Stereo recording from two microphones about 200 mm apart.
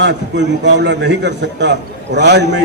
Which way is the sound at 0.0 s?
60° right (ahead or behind).